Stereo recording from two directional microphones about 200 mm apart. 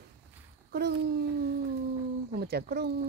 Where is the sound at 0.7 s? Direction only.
55° right (ahead or behind).